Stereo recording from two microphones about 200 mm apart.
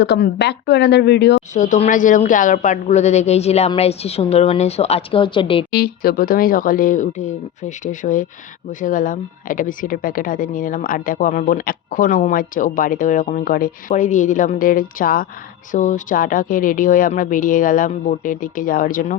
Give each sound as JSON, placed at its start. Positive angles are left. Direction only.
{"t": 0.0, "sound": "speech", "side_deg": 55}
{"t": 1.5, "sound": "a woman's voice", "side_deg": 40}
{"t": 5.7, "sound": "a woman's voice", "side_deg": 50}